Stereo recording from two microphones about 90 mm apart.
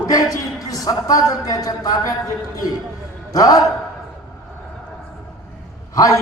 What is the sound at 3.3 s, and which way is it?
Speech, 40° left (ahead or behind).